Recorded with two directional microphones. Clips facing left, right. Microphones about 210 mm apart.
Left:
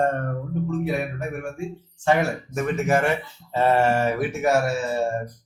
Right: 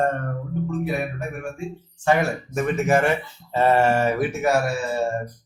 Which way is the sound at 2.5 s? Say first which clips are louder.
Right 2 dB; 30° right (ahead or behind).